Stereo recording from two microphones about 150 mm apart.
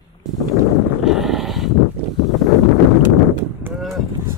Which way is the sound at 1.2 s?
Centre (ahead or behind).